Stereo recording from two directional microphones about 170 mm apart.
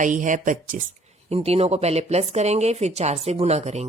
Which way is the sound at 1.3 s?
35° right (ahead or behind).